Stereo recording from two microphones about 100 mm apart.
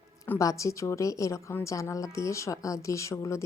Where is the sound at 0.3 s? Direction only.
35° left (ahead or behind).